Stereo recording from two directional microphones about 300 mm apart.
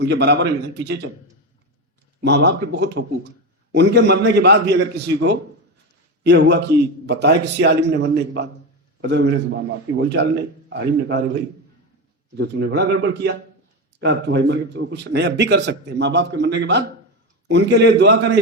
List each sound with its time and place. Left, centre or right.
0.0 s a man's voice: right
2.2 s a man's voice: right